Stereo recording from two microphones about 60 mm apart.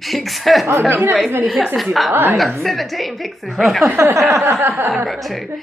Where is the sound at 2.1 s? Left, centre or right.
Right.